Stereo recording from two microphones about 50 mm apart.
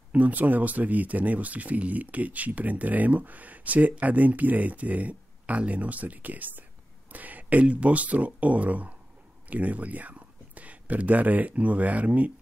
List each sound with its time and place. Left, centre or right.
0.1 s speech: right